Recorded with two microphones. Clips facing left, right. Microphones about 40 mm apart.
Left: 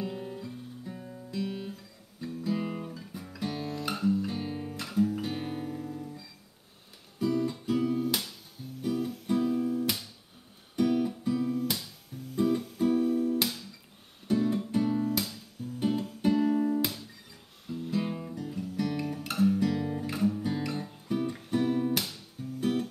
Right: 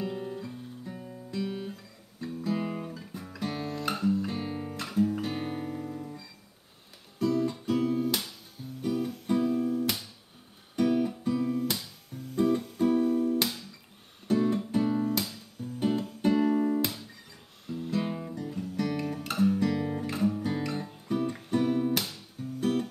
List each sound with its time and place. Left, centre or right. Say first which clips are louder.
0.0 s guitar: right 2 dB; centre
7.2 s guitar: right 1 dB; centre
10.8 s music: right 1 dB; centre
17.6 s guitar: right 1 dB; centre
20.1 s music: even; centre
20.3 s guitar: right 1 dB; centre
20.7 s music: right 1 dB; centre